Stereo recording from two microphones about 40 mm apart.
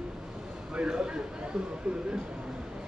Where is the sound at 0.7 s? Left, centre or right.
Right.